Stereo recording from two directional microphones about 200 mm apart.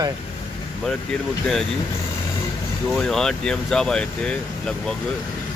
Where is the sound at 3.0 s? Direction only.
Centre (ahead or behind).